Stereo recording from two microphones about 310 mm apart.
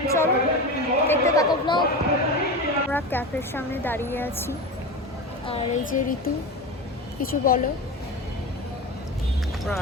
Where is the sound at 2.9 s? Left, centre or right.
Centre.